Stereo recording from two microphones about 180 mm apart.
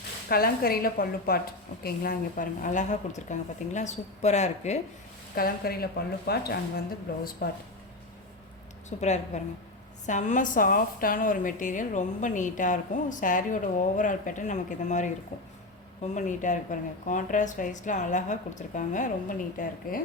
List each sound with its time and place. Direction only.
0.3 s a woman's voice: 55° left (ahead or behind); by 4.8 s 40° left (ahead or behind)
5.3 s a woman's voice: 55° left (ahead or behind)
8.9 s a woman's voice: 40° left (ahead or behind)